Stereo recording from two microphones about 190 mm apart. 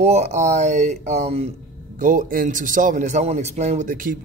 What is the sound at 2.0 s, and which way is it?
A man's voice, 45° right (ahead or behind).